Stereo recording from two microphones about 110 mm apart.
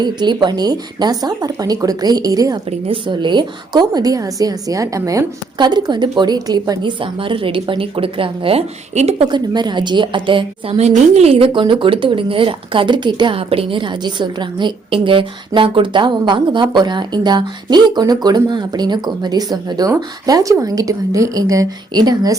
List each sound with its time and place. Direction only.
0.0 s a woman's voice: 40° right (ahead or behind)
2.8 s a woman's voice: 50° right (ahead or behind); by 5.2 s 30° right (ahead or behind)
5.5 s a woman's voice: 40° right (ahead or behind)
7.0 s speech: 50° right (ahead or behind); by 9.2 s 70° right (ahead or behind)
9.3 s speech: 40° right (ahead or behind)
10.8 s speech: 75° right (ahead or behind); by 22.4 s 35° right (ahead or behind)